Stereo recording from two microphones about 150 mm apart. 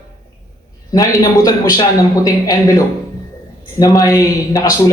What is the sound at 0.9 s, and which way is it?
A man's voice, 25° left (ahead or behind).